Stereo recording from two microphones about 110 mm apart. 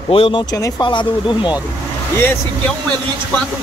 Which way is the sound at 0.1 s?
50° left (ahead or behind).